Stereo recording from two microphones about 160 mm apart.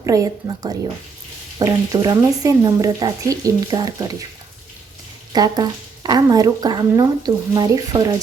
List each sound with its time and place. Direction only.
0.0 s speech: 20° right (ahead or behind)
5.3 s speech: 25° right (ahead or behind)